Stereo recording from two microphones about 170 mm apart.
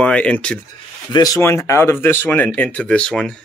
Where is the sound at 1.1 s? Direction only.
20° left (ahead or behind); by 3.4 s 5° left (ahead or behind).